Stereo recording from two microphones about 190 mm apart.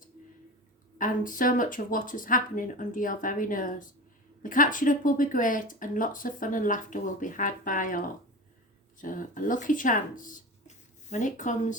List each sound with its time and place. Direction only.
0.9 s speech: 45° left (ahead or behind)